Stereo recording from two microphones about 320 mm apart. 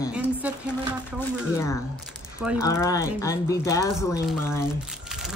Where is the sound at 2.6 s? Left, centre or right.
Centre.